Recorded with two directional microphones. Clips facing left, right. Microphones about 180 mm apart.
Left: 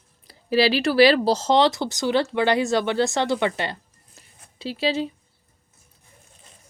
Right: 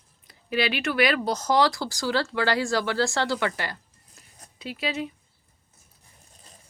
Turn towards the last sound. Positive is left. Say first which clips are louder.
# left 6 dB
turn(degrees=30)  # may be behind; listen again after turning